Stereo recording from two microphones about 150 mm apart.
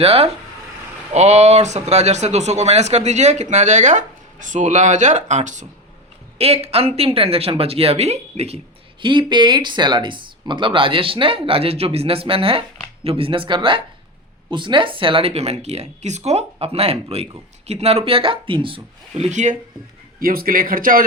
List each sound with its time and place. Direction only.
0.0 s speech: 45° right (ahead or behind)
6.4 s speech: 45° right (ahead or behind)
20.1 s speech: 75° right (ahead or behind)